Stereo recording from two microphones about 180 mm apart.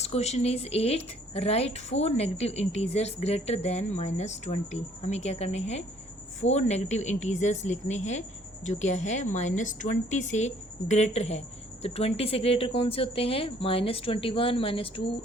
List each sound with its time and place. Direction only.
0.0 s a woman's voice: 35° left (ahead or behind)